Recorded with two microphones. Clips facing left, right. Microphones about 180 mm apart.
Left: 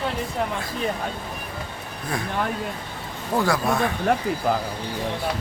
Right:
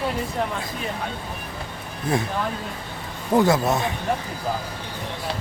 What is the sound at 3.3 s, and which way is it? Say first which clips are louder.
Speech: right 4 dB; 20° right (ahead or behind).